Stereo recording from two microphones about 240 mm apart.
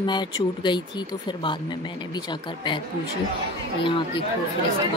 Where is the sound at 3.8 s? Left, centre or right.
Left.